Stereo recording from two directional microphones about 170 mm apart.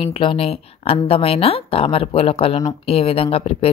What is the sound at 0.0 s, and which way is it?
Speech, 30° left (ahead or behind).